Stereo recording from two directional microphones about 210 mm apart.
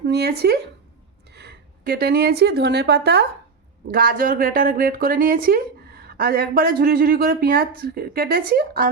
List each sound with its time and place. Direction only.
0.0 s speech: 50° right (ahead or behind)